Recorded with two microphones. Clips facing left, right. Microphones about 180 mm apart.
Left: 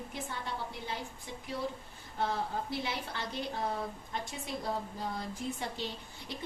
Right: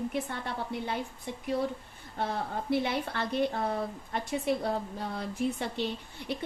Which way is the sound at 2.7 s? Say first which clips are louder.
Right 8 dB; 60° right (ahead or behind).